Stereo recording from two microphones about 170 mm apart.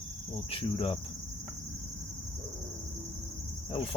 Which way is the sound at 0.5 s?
35° left (ahead or behind).